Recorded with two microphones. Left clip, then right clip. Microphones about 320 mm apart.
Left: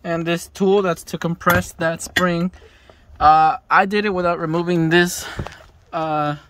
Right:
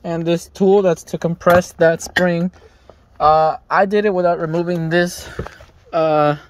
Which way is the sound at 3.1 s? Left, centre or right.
Centre.